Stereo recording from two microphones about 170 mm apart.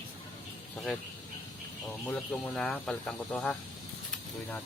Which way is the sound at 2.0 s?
5° left (ahead or behind).